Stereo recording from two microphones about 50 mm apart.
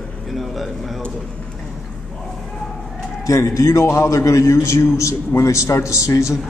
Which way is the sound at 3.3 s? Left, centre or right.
Left.